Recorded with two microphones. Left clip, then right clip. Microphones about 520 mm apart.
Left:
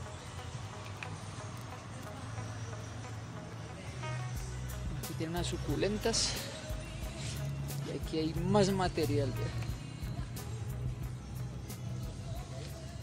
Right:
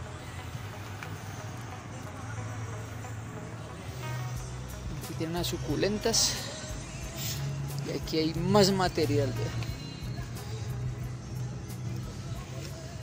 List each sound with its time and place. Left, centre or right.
5.2 s speech: left
7.9 s speech: left